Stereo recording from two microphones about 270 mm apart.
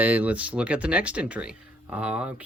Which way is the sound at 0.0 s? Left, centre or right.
Centre.